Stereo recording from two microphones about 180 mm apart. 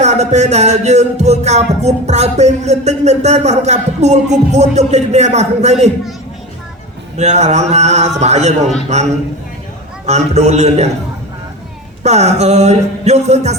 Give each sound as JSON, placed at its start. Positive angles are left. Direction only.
{"t": 0.0, "sound": "music", "side_deg": -40}
{"t": 7.2, "sound": "music", "side_deg": -40}
{"t": 10.1, "sound": "music", "side_deg": -40}
{"t": 12.0, "sound": "music", "side_deg": -40}